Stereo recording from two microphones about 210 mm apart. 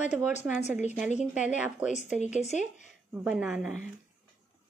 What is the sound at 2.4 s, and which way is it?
Speech, 35° left (ahead or behind).